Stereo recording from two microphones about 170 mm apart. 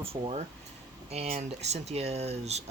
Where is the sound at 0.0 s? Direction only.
35° right (ahead or behind).